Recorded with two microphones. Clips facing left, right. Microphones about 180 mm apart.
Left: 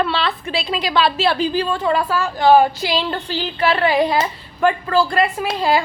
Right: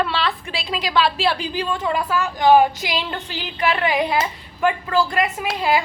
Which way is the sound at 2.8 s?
35° left (ahead or behind).